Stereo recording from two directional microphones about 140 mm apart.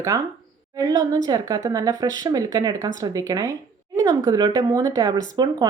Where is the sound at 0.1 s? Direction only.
25° right (ahead or behind).